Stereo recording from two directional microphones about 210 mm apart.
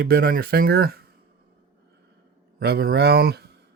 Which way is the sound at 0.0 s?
45° right (ahead or behind).